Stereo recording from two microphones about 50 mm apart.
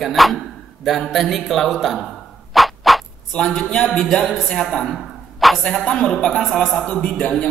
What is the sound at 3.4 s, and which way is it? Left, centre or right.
Speech, centre.